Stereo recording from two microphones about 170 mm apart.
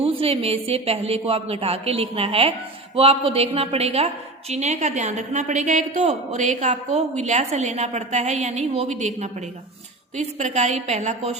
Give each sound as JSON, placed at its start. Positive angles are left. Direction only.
{"t": 0.0, "sound": "a woman's voice", "side_deg": -35}